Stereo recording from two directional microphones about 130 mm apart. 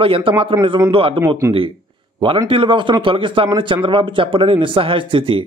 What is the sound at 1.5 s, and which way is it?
Speech, 25° right (ahead or behind).